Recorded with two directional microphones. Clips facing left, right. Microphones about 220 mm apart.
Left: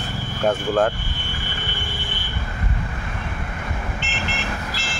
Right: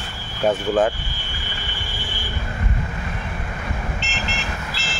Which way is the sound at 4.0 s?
55° left (ahead or behind).